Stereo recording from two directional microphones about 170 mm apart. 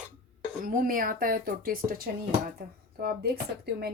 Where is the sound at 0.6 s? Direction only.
55° right (ahead or behind).